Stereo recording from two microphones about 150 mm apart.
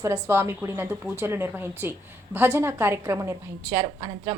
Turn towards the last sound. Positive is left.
turn(degrees=-25)  # may be behind; listen again after turning